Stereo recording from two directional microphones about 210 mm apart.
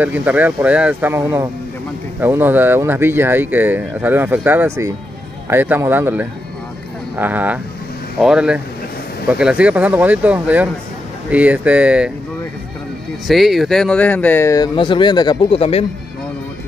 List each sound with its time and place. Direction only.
0.0 s speech: 10° right (ahead or behind)
13.3 s speech: centre (ahead or behind); by 15.8 s 25° left (ahead or behind)